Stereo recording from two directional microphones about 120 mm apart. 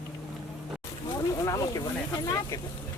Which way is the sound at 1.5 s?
25° left (ahead or behind).